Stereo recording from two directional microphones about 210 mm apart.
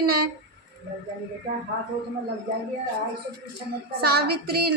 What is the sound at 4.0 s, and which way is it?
Speech, 50° right (ahead or behind).